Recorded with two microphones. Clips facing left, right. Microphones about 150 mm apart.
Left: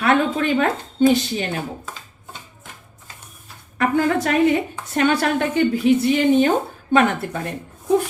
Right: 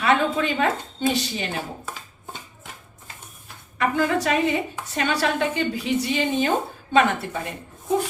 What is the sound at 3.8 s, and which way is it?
A woman's voice, 50° left (ahead or behind).